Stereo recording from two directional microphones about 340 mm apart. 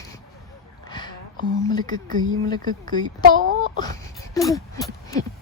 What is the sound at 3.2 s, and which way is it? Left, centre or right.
Speech, right.